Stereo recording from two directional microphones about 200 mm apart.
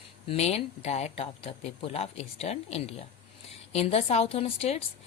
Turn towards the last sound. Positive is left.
turn(degrees=30)  # may be behind; listen again after turning